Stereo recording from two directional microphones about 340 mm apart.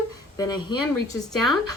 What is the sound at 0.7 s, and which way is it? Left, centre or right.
Speech, left.